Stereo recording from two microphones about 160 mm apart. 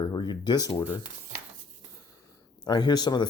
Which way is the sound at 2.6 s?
25° left (ahead or behind).